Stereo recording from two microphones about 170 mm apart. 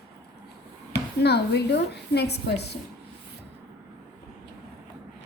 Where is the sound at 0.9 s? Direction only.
85° left.